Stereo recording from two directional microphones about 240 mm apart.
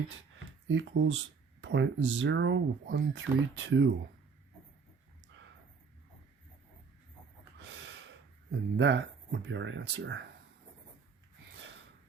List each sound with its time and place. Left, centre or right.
0.7 s speech: right
7.6 s gasp: right
8.7 s speech: right